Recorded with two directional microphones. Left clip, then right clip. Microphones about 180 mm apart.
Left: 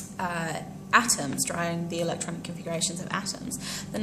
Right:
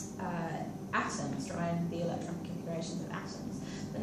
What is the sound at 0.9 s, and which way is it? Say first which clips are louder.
A woman's voice: left 12 dB; 40° left (ahead or behind).